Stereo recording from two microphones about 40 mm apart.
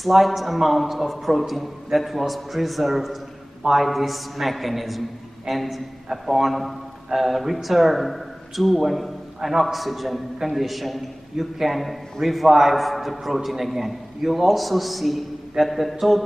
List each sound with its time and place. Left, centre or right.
0.0 s a man's voice: centre